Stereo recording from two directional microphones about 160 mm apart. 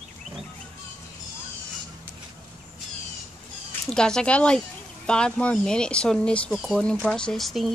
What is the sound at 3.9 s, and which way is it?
Speech, 5° left (ahead or behind).